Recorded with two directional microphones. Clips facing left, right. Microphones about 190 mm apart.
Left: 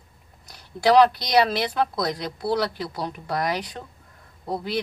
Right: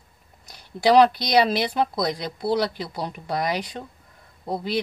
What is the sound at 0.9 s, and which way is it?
Speech, 15° right (ahead or behind).